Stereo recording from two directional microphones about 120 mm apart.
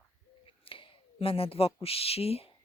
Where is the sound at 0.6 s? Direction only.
50° left (ahead or behind).